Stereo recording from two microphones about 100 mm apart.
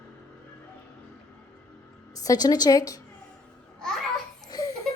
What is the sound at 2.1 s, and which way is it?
Speech, 40° left (ahead or behind).